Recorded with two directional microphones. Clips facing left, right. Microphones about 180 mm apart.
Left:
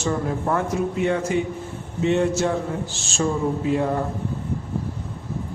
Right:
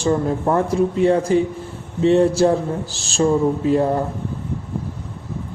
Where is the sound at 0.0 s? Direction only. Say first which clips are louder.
Right 5 dB; 30° right (ahead or behind).